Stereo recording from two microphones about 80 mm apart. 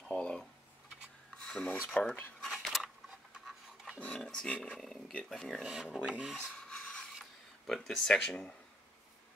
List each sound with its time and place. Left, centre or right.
0.1 s tick-tock: centre
1.3 s filing: centre
1.8 s speech: centre
2.5 s a sound: centre
4.0 s speech: centre
5.7 s speech: centre
6.4 s rub: centre
7.2 s speech: centre